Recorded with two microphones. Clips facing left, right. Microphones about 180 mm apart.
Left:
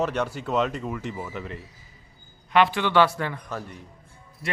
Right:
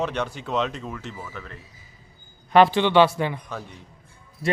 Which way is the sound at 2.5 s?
35° right (ahead or behind).